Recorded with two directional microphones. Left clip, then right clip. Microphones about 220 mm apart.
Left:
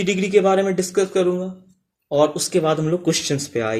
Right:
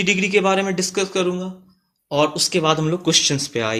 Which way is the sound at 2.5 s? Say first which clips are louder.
Even; 10° right (ahead or behind).